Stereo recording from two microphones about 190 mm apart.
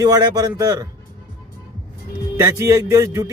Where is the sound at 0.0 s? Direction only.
20° right (ahead or behind).